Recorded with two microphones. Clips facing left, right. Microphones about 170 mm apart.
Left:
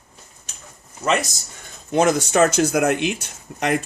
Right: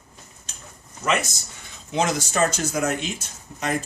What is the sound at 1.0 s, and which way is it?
Speech, 30° left (ahead or behind).